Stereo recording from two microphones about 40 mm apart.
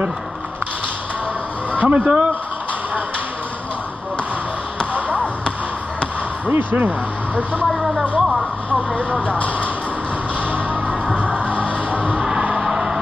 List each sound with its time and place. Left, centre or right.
1.7 s speech: right
6.5 s speech: right
7.6 s speech: centre
8.2 s a sound: centre
8.6 s speech: right
10.5 s music: right
12.2 s music: right
12.5 s vehicle: centre